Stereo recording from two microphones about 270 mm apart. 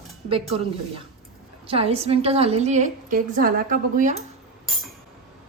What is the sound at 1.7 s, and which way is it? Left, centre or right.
A woman's voice, right.